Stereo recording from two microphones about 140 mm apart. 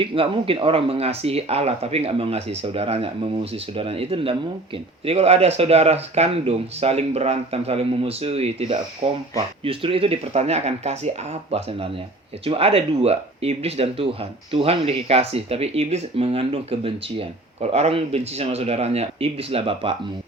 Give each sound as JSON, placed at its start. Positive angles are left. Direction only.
{"t": 0.0, "sound": "speech", "side_deg": -40}